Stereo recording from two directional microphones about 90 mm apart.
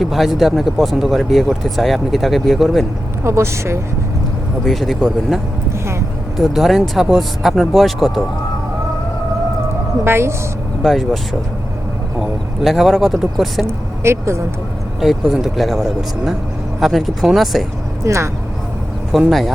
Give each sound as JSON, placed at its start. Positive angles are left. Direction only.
{"t": 0.0, "sound": "speech", "side_deg": 0}
{"t": 3.2, "sound": "a woman's voice", "side_deg": -30}
{"t": 4.6, "sound": "speech", "side_deg": 0}
{"t": 6.4, "sound": "speech", "side_deg": 0}
{"t": 10.0, "sound": "a woman's voice", "side_deg": -30}
{"t": 10.8, "sound": "speech", "side_deg": 0}
{"t": 12.2, "sound": "speech", "side_deg": 0}
{"t": 13.7, "sound": "speech", "side_deg": -30}
{"t": 15.0, "sound": "speech", "side_deg": 0}
{"t": 18.0, "sound": "speech", "side_deg": -30}
{"t": 19.3, "sound": "speech", "side_deg": 0}